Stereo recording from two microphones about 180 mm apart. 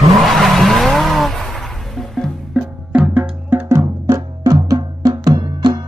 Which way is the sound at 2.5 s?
5° right (ahead or behind).